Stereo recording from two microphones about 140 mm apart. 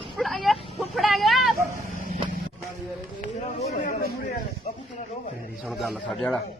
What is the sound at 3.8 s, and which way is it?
Speech, 90° left.